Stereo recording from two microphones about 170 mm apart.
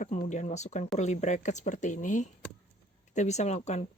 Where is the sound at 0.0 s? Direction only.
45° left (ahead or behind).